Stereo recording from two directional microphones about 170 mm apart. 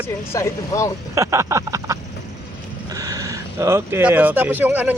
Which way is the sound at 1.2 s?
15° right (ahead or behind).